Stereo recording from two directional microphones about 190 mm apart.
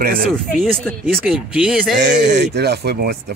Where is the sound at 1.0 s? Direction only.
5° right (ahead or behind).